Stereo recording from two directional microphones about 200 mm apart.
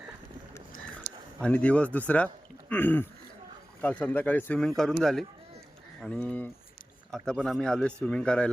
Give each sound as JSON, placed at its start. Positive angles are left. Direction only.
{"t": 1.4, "sound": "speech", "side_deg": 5}